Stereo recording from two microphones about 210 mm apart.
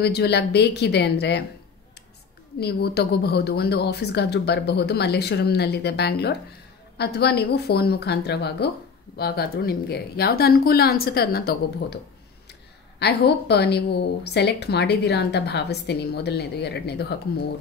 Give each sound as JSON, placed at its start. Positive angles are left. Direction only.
{"t": 0.0, "sound": "speech", "side_deg": 50}
{"t": 2.6, "sound": "speech", "side_deg": 50}
{"t": 13.0, "sound": "speech", "side_deg": 50}